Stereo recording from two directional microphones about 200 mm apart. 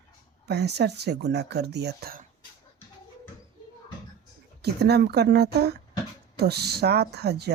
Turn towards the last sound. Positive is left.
turn(degrees=-55)  # may be behind; listen again after turning